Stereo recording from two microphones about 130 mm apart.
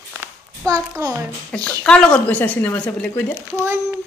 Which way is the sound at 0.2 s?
25° right (ahead or behind).